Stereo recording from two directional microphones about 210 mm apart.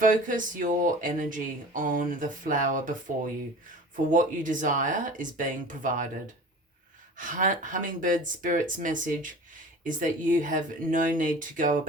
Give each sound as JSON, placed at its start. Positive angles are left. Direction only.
{"t": 0.0, "sound": "speech", "side_deg": -40}
{"t": 4.1, "sound": "speech", "side_deg": -40}
{"t": 7.2, "sound": "speech", "side_deg": -40}